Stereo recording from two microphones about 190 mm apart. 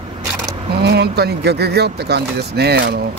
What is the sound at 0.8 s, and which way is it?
Speech, 60° right (ahead or behind).